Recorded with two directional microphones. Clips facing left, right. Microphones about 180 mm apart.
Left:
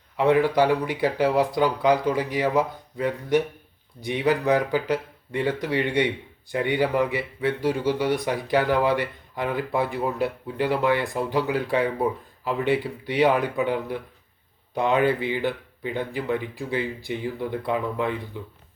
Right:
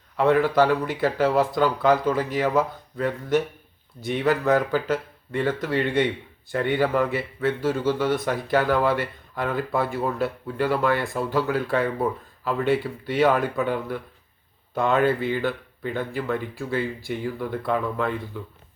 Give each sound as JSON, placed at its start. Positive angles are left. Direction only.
{"t": 0.2, "sound": "a man's voice", "side_deg": 15}